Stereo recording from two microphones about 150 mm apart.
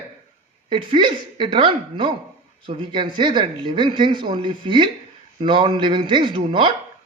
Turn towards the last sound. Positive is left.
turn(degrees=-30)  # may be behind; listen again after turning